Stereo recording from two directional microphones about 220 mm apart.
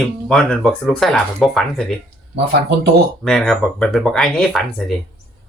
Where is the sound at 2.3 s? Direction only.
50° right (ahead or behind).